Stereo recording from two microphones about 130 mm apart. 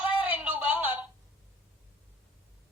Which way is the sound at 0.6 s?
40° left (ahead or behind).